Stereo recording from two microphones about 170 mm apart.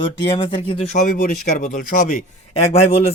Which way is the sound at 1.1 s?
60° left (ahead or behind).